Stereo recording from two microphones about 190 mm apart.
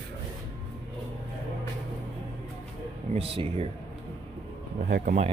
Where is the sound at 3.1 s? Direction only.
30° right (ahead or behind).